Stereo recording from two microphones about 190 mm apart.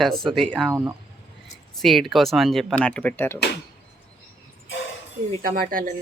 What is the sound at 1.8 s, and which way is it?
Speech, centre (ahead or behind).